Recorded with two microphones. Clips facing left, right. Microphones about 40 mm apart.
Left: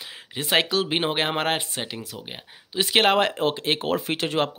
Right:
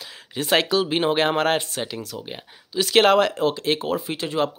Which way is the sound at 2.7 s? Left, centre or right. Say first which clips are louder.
Right 3 dB; left.